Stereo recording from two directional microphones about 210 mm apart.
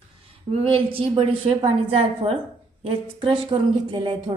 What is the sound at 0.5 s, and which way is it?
A woman's voice, 30° right (ahead or behind).